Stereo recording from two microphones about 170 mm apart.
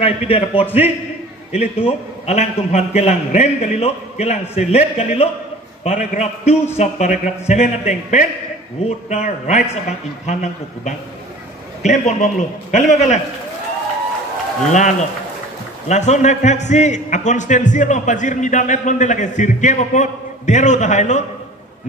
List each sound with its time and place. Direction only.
0.0 s a man's voice: 35° left (ahead or behind)
14.7 s a man's voice: 45° left (ahead or behind)